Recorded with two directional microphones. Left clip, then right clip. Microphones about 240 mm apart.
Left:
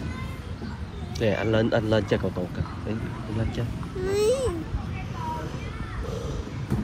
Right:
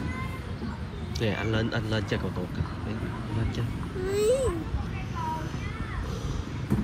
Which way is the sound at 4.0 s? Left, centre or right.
Left.